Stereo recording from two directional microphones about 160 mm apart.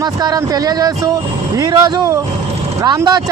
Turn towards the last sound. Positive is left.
turn(degrees=-25)  # may be behind; listen again after turning